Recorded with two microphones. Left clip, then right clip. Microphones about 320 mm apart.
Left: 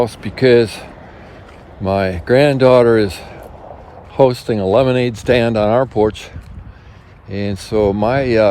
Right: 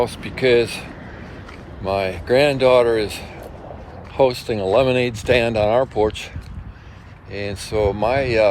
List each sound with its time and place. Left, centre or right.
0.0 s speech: left